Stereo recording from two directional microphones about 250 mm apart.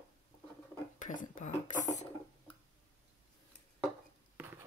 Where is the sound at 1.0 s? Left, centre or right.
Left.